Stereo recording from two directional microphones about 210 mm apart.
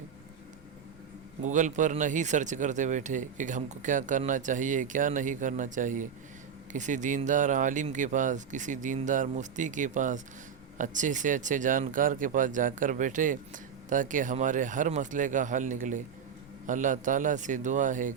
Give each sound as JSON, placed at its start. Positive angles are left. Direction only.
{"t": 1.4, "sound": "speech", "side_deg": -35}